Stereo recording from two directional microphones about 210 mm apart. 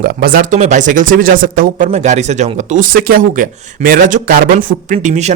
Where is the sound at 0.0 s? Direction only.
45° right (ahead or behind).